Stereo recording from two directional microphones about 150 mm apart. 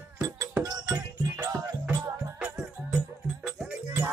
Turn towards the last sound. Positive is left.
turn(degrees=-10)  # may be behind; listen again after turning